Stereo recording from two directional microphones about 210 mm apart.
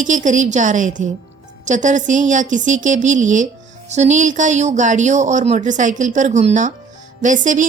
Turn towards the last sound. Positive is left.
turn(degrees=-40)  # may be behind; listen again after turning